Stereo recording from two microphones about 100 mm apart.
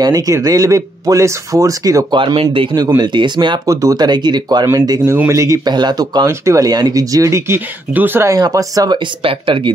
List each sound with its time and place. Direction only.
0.0 s speech: 40° right (ahead or behind)
2.1 s speech: 55° right (ahead or behind)
3.6 s speech: 35° right (ahead or behind)
5.0 s speech: 25° right (ahead or behind)
5.7 s speech: 45° right (ahead or behind)
6.2 s speech: 30° right (ahead or behind)
8.3 s speech: 35° right (ahead or behind)
8.9 s speech: 60° right (ahead or behind)